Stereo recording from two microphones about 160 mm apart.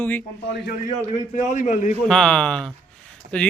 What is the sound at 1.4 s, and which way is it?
Speech, 50° left (ahead or behind).